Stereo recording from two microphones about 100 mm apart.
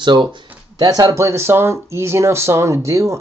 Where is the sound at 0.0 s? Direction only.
50° right (ahead or behind).